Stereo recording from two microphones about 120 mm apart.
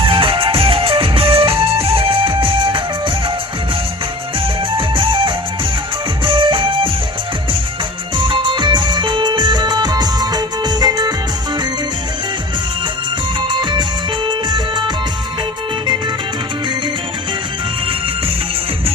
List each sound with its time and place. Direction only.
0.0 s music: 45° right (ahead or behind)
4.8 s music: 45° right (ahead or behind)
8.2 s music: 40° right (ahead or behind)
13.5 s music: 40° right (ahead or behind)